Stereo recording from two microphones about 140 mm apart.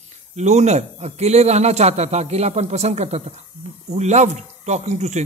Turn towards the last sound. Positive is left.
turn(degrees=-55)  # may be behind; listen again after turning